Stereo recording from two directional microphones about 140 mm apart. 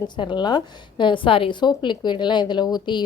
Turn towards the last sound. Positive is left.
turn(degrees=30)  # may be behind; listen again after turning